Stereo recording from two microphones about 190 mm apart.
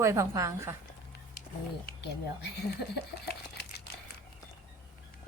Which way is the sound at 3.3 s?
60° left (ahead or behind).